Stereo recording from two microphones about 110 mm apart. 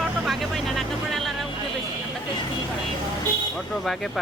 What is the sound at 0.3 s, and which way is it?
Vehicle, centre (ahead or behind).